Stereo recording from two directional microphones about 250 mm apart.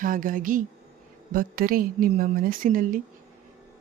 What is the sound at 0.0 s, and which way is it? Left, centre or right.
Speech, right.